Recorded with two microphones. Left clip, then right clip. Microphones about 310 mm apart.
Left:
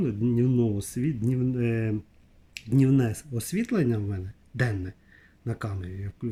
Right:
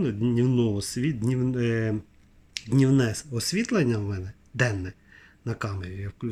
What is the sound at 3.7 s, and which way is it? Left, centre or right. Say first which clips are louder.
Speech: even; right.